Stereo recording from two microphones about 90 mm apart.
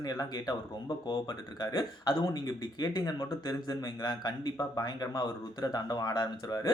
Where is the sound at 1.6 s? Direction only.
55° left (ahead or behind).